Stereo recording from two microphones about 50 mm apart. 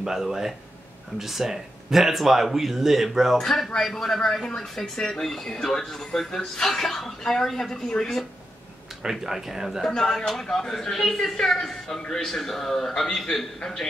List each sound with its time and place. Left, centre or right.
0.0 s speech: centre
3.3 s speech: centre
9.0 s speech: centre
9.8 s speech: centre